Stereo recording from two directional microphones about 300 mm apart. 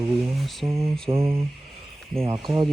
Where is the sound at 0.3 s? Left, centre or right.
Centre.